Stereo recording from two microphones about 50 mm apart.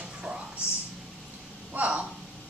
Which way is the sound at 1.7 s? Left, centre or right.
Right.